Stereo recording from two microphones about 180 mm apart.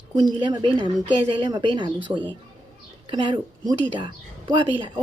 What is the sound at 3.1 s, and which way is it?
Speech, 25° right (ahead or behind).